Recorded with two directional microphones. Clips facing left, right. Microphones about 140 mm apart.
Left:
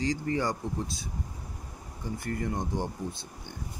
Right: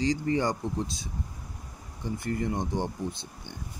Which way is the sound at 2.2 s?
25° right (ahead or behind).